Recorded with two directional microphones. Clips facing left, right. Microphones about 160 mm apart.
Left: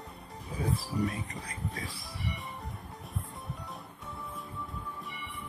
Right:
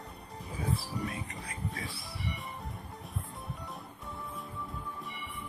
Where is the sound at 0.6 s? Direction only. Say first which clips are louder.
Left 4 dB; 40° left (ahead or behind).